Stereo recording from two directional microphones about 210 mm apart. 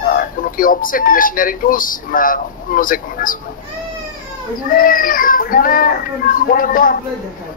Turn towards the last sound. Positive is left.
turn(degrees=40)  # may be behind; listen again after turning